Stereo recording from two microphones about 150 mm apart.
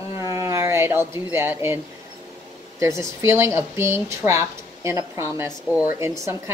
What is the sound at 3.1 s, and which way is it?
A woman's voice, 20° right (ahead or behind).